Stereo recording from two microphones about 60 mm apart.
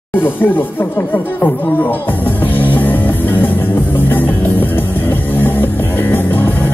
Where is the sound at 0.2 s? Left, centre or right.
Left.